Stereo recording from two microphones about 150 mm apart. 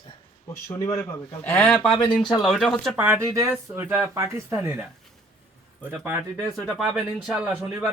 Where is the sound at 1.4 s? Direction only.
10° left (ahead or behind).